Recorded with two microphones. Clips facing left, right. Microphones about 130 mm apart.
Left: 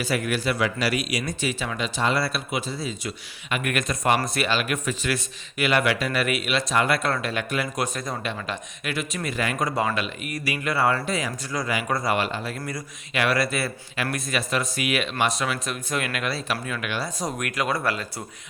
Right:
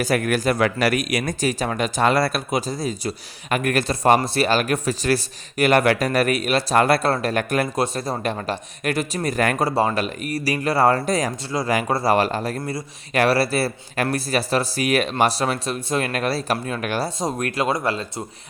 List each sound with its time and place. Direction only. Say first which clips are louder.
0.0 s speech: right 5 dB; 45° right (ahead or behind)
7.8 s speech: right 5 dB; 30° right (ahead or behind); by 9.6 s 45° right (ahead or behind)
9.6 s speech: right 5 dB; 30° right (ahead or behind)
17.2 s speech: right 4 dB; 25° right (ahead or behind)